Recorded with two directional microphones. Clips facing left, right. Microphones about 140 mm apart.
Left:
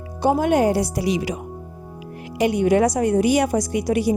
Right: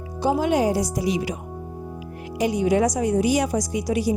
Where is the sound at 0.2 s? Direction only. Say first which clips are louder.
Left 3 dB; 55° left (ahead or behind); by 1.4 s 80° left.